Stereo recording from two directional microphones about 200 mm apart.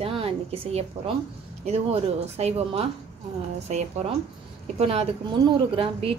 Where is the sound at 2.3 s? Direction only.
30° right (ahead or behind).